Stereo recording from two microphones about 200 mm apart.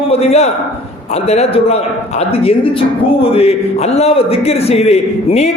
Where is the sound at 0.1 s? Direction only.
30° left (ahead or behind).